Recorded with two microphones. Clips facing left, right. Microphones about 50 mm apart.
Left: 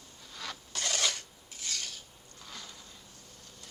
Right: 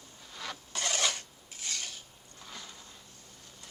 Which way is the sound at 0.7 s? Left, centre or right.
Centre.